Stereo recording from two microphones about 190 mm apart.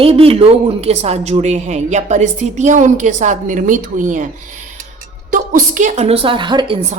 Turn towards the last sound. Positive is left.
turn(degrees=-25)  # may be behind; listen again after turning